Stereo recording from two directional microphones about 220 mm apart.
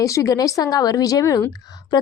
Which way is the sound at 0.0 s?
15° left (ahead or behind).